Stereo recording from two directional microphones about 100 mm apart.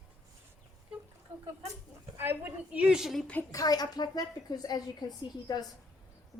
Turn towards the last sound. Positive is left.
turn(degrees=40)  # may be behind; listen again after turning